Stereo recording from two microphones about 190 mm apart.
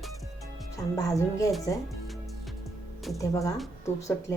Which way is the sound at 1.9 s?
Centre (ahead or behind).